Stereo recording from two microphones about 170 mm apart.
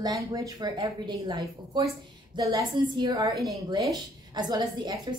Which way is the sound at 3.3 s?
Centre (ahead or behind).